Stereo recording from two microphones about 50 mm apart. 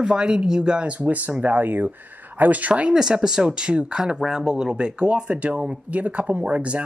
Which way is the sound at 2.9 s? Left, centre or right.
Centre.